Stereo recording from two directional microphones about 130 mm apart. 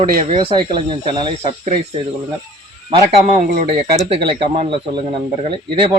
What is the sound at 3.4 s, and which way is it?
Speech, 90° right.